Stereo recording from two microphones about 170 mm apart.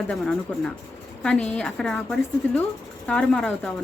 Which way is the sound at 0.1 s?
5° left (ahead or behind).